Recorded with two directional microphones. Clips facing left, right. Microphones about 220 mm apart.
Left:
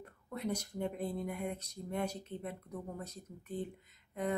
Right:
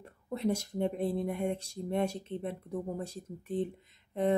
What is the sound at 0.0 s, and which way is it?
Speech, 25° right (ahead or behind).